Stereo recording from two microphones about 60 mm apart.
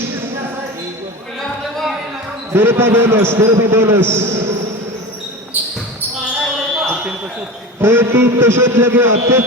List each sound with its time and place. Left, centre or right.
2.5 s a man's voice: right
5.5 s basketball bounce: right
7.8 s a man's voice: right